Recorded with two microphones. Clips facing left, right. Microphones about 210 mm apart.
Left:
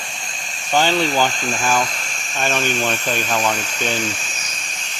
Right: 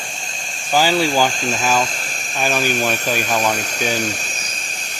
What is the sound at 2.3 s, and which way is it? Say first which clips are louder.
Speech: right 1 dB; 5° right (ahead or behind).